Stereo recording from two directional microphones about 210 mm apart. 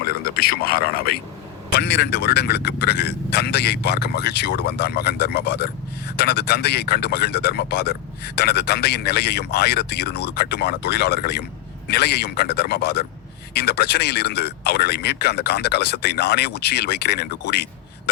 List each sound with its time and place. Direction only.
0.0 s speech: 45° left (ahead or behind)